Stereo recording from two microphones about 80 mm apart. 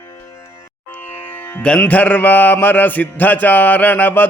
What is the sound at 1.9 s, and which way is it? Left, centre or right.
Mantra, left.